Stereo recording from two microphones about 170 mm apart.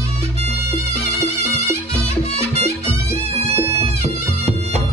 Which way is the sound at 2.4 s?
35° right (ahead or behind).